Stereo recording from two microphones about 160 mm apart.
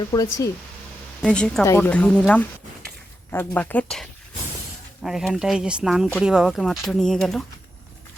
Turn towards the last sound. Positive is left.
turn(degrees=0)  # may be behind; listen again after turning